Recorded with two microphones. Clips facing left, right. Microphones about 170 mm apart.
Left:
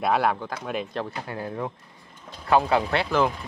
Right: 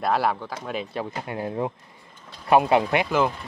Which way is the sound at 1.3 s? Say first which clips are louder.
Right 6 dB; 25° right (ahead or behind).